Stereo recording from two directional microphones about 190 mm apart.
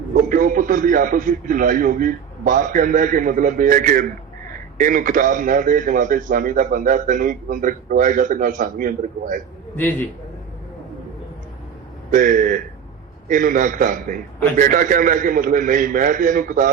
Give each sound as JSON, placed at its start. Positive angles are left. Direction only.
{"t": 0.1, "sound": "a man's voice", "side_deg": -45}
{"t": 12.1, "sound": "a man's voice", "side_deg": -45}